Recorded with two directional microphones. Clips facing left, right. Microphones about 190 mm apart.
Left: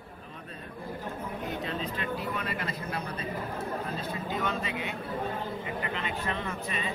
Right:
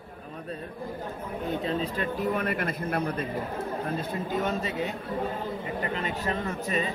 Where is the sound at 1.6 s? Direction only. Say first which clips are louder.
Right 5 dB; 40° right (ahead or behind); by 3.2 s 55° right (ahead or behind).